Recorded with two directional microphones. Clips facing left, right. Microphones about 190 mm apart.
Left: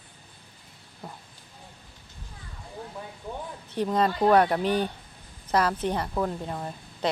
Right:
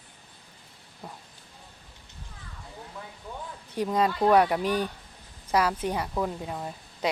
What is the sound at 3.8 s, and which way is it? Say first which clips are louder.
A woman's voice: left 1 dB; 10° right (ahead or behind).